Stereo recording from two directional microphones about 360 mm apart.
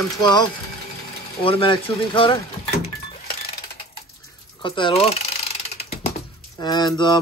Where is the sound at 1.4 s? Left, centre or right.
Centre.